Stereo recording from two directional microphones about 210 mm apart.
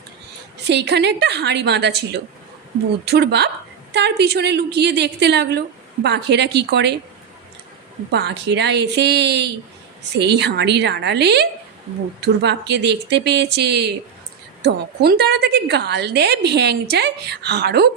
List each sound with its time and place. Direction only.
0.7 s a woman's voice: 55° right (ahead or behind)
8.1 s a woman's voice: 55° right (ahead or behind)